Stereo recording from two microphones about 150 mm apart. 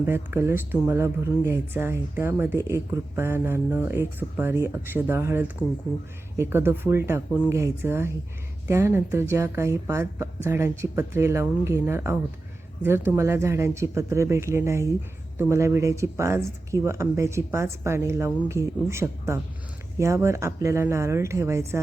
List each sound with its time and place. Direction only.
0.0 s speech: 15° right (ahead or behind)